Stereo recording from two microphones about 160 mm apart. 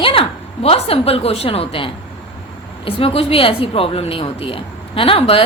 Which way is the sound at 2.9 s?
35° left (ahead or behind).